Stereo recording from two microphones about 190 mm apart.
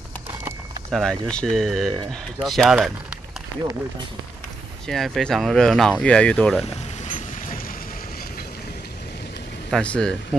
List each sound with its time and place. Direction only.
0.9 s speech: 5° left (ahead or behind)
4.8 s speech: centre (ahead or behind)
7.1 s vehicle: 40° left (ahead or behind)
9.7 s speech: 5° left (ahead or behind)